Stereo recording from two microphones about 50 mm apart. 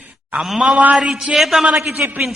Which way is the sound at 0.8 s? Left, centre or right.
Right.